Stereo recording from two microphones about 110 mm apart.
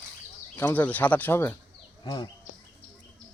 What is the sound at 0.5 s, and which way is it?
Speech, 15° left (ahead or behind).